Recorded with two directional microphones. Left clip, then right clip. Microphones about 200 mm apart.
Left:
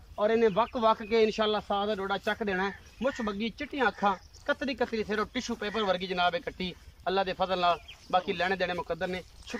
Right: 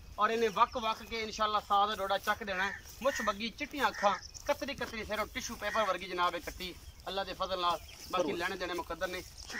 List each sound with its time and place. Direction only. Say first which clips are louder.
0.2 s speech: left 3 dB; 35° left (ahead or behind)